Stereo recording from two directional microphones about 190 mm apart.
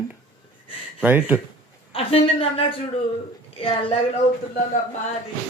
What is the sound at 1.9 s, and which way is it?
A woman's voice, 30° left (ahead or behind).